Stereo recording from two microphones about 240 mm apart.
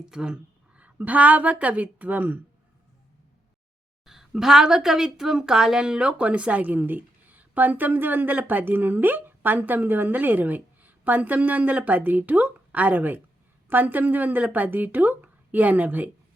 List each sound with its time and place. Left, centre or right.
0.0 s a woman's voice: centre
4.0 s a woman's voice: centre